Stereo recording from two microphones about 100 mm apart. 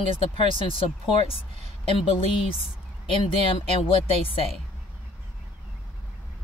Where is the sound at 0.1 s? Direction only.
65° left (ahead or behind).